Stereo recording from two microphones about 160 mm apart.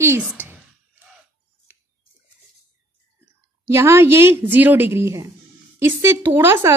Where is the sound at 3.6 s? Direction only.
15° right (ahead or behind).